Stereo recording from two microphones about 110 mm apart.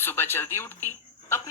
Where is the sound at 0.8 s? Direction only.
25° left (ahead or behind).